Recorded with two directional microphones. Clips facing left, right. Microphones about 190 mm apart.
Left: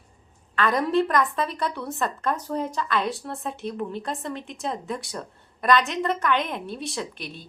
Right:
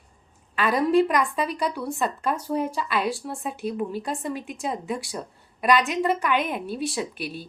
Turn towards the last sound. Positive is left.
turn(degrees=20)  # may be behind; listen again after turning